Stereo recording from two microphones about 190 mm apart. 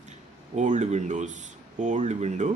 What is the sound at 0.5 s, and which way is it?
Speech, 40° right (ahead or behind).